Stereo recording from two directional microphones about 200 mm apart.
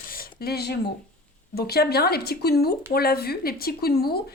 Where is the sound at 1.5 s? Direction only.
50° left (ahead or behind).